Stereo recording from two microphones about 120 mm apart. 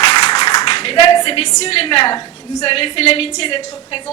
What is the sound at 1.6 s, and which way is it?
A woman's voice, 55° left (ahead or behind).